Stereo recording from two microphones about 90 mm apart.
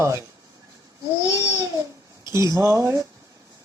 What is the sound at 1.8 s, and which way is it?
A child's voice, 35° right (ahead or behind).